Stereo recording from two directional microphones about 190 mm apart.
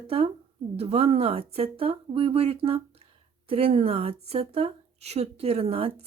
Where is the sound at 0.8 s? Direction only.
30° right (ahead or behind).